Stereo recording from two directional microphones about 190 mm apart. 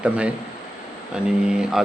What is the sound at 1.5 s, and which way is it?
Speech, 5° right (ahead or behind).